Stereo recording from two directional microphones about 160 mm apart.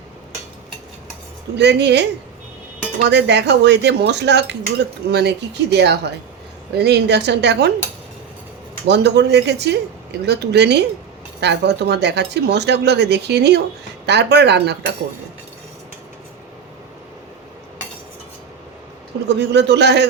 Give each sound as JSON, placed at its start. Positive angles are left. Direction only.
{"t": 1.5, "sound": "speech", "side_deg": -90}
{"t": 3.1, "sound": "speech", "side_deg": -90}
{"t": 8.9, "sound": "speech", "side_deg": -90}
{"t": 19.3, "sound": "speech", "side_deg": -90}